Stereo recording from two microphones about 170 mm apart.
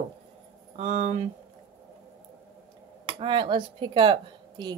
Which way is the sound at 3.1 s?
30° right (ahead or behind).